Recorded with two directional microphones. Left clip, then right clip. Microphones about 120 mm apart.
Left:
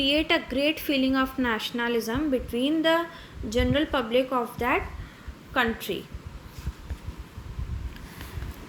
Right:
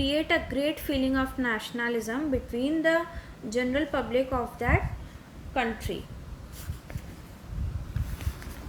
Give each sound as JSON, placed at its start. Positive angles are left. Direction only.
{"t": 0.0, "sound": "a woman's voice", "side_deg": 35}
{"t": 5.9, "sound": "a woman's voice", "side_deg": 45}